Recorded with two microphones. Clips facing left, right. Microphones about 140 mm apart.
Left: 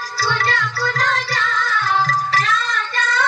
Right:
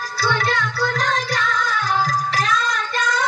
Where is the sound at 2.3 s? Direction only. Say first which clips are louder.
Even; 40° right (ahead or behind).